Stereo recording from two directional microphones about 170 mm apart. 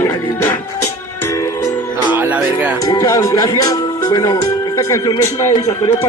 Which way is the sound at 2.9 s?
20° left (ahead or behind).